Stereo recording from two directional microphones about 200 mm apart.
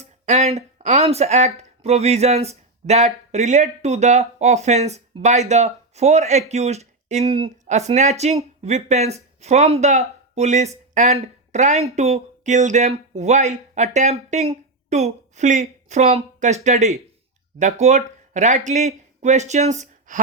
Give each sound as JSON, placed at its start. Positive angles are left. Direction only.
{"t": 0.0, "sound": "speech", "side_deg": -35}